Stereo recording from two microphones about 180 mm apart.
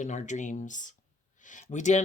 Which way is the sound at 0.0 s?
40° left (ahead or behind).